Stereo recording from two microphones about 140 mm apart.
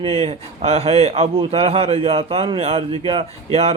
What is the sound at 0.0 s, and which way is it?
A man's voice, 45° right (ahead or behind).